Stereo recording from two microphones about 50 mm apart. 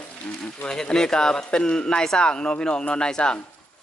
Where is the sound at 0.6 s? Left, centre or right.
Centre.